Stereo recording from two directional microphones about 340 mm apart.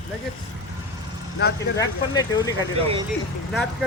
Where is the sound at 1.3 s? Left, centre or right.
Left.